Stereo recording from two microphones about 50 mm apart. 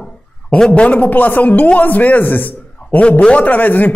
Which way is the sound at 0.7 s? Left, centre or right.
Left.